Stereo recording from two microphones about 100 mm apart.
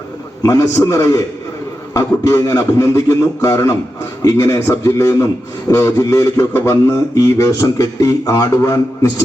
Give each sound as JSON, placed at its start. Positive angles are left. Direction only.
{"t": 0.4, "sound": "a man's voice", "side_deg": 30}